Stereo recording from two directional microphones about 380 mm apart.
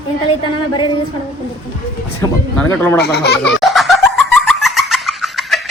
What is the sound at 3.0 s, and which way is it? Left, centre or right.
Speech, left.